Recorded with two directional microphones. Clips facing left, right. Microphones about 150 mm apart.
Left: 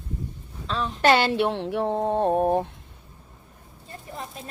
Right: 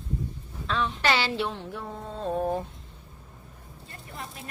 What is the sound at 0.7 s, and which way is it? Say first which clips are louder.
Speech: left 5 dB; 40° left (ahead or behind).